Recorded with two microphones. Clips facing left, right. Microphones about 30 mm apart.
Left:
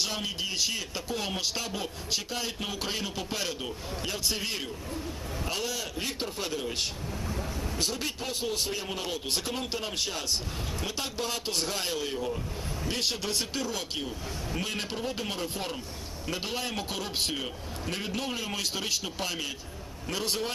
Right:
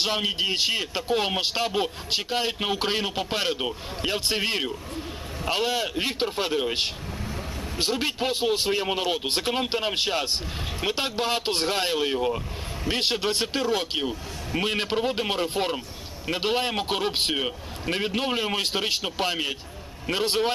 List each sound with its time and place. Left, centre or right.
0.0 s speech: right